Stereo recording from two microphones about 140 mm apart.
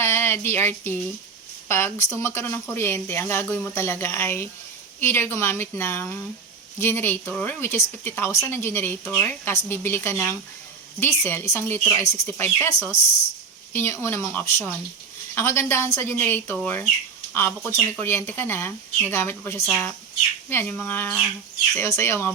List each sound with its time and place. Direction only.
0.0 s speech: 15° left (ahead or behind)